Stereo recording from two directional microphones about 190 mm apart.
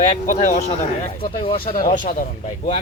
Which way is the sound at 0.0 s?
40° left (ahead or behind).